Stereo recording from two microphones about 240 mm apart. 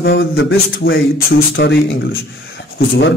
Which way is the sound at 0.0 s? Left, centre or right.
Left.